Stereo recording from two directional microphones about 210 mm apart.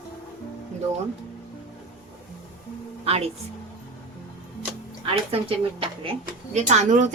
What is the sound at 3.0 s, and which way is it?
Speech, 30° right (ahead or behind).